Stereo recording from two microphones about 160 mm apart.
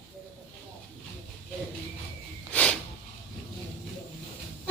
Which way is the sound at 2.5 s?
5° left (ahead or behind).